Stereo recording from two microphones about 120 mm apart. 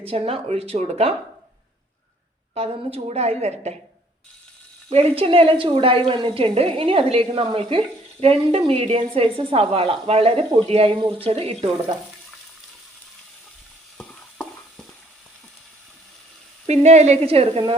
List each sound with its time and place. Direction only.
0.0 s a woman's voice: 50° right (ahead or behind)
2.6 s a woman's voice: 60° right (ahead or behind)
4.9 s a woman's voice: 55° right (ahead or behind)
14.0 s stir: 5° left (ahead or behind)
16.6 s a woman's voice: 65° right (ahead or behind)